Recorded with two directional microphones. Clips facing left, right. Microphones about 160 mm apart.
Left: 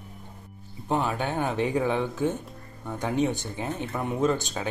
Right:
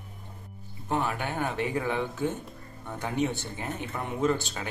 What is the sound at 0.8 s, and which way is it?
Speech, 20° left (ahead or behind).